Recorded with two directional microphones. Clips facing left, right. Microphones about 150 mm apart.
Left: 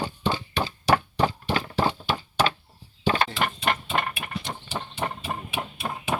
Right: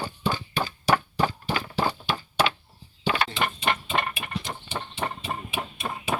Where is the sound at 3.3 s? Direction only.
Centre (ahead or behind).